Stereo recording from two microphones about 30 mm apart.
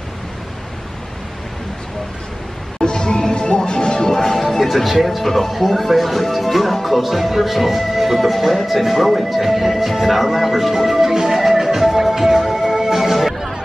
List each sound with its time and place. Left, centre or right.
2.8 s music: left
4.2 s speech: centre